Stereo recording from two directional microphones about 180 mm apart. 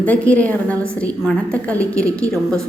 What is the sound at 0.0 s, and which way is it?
A woman's voice, 10° left (ahead or behind).